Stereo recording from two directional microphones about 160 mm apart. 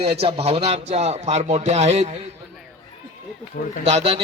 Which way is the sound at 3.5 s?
70° left (ahead or behind).